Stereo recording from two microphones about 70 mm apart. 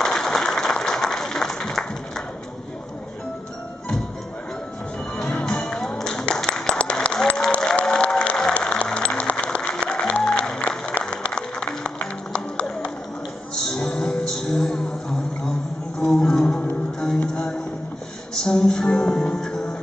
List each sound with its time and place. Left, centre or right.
0.0 s applause: centre
5.1 s music: centre
7.7 s applause: centre
10.6 s a sound: centre
11.1 s music: centre
13.7 s music: centre
16.0 s a sound: centre
16.4 s music: left
17.0 s music: centre